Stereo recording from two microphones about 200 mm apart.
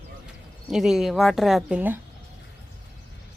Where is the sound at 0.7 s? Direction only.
Centre (ahead or behind).